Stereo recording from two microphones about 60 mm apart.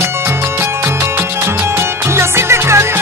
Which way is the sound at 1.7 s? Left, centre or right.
Right.